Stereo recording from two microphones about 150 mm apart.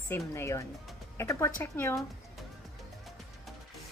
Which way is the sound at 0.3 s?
20° left (ahead or behind).